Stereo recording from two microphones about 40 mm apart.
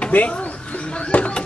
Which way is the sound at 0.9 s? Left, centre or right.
Left.